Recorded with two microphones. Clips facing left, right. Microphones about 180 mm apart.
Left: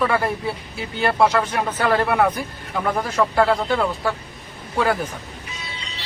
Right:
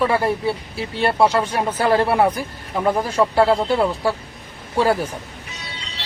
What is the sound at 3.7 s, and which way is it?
A man's voice, 30° right (ahead or behind).